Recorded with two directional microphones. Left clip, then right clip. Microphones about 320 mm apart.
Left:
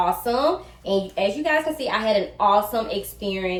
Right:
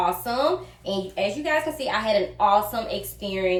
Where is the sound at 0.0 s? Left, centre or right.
Centre.